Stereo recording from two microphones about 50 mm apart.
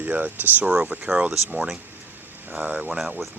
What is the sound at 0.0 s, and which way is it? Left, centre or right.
Speech, right.